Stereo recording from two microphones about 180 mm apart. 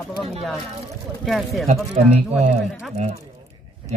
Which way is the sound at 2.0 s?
40° right (ahead or behind).